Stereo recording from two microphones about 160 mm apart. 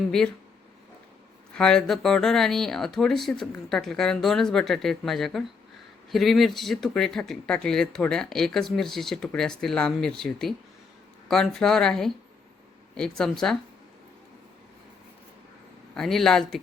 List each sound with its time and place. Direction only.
1.5 s speech: 5° left (ahead or behind)
16.0 s speech: centre (ahead or behind)